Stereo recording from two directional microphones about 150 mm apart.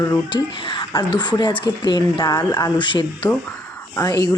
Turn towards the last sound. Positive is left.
turn(degrees=20)  # may be behind; listen again after turning